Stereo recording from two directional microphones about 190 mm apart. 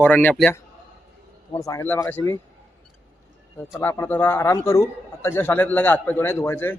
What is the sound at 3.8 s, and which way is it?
A man's voice, 10° left (ahead or behind).